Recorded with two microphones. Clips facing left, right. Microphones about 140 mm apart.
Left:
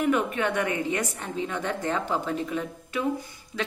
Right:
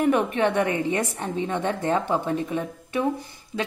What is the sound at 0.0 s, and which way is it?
A woman's voice, 30° right (ahead or behind).